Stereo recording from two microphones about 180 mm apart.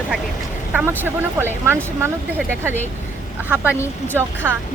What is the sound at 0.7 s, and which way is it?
Speech, 10° right (ahead or behind).